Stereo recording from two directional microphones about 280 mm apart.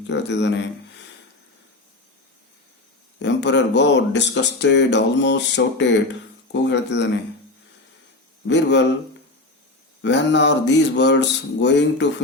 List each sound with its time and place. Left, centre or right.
0.1 s speech: left
3.2 s speech: left
8.4 s speech: left
10.0 s speech: left